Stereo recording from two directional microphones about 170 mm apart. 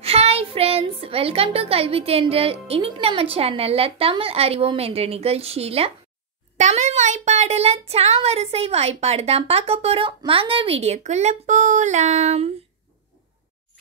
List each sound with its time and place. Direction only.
0.0 s a woman's voice: 35° right (ahead or behind)